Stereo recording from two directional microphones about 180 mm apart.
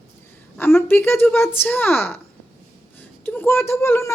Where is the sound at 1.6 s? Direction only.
10° left (ahead or behind).